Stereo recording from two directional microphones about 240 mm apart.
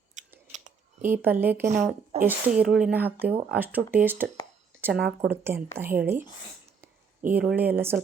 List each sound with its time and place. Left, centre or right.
0.2 s scissors: right
0.5 s a sound: right
1.2 s speech: centre